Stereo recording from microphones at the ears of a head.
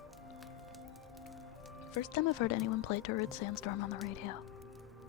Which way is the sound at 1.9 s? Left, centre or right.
Left.